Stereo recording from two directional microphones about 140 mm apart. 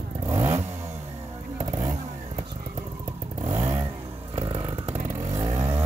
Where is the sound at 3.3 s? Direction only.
50° right (ahead or behind).